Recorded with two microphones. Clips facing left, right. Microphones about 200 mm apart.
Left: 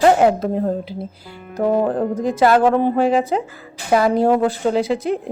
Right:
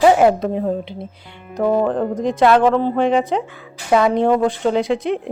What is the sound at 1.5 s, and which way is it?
Music, 5° left (ahead or behind).